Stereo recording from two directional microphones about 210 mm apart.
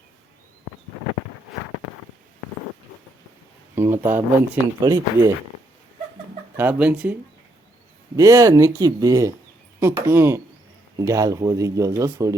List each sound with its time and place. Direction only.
3.8 s speech: 10° right (ahead or behind)
6.6 s speech: 5° right (ahead or behind)